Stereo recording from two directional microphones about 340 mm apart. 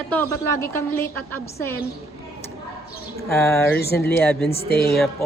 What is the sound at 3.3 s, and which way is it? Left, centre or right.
Speech, centre.